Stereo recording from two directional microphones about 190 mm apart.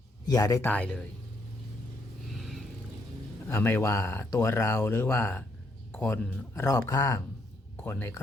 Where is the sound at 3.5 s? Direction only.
10° left (ahead or behind).